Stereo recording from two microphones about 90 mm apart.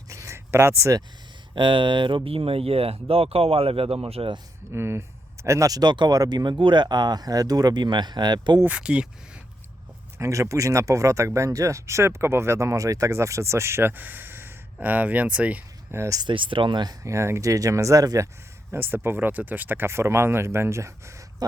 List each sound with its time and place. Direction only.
0.1 s a sound: 35° right (ahead or behind)
1.5 s speech: 65° right (ahead or behind); by 4.4 s 90° right
4.7 s speech: 30° right (ahead or behind); by 8.6 s 55° right (ahead or behind)
8.6 s speech: 15° right (ahead or behind)
10.2 s speech: 35° right (ahead or behind); by 15.6 s 15° right (ahead or behind)
15.9 s speech: 35° right (ahead or behind)
16.2 s speech: 70° right (ahead or behind); by 17.0 s 55° right (ahead or behind)
17.0 s speech: 35° right (ahead or behind)
18.7 s speech: 20° right (ahead or behind)